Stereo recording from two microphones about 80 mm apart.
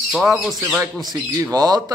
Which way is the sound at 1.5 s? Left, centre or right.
Right.